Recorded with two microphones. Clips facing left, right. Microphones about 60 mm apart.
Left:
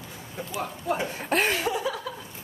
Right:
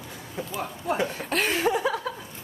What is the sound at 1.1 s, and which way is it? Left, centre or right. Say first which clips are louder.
Speech: left 2 dB; left.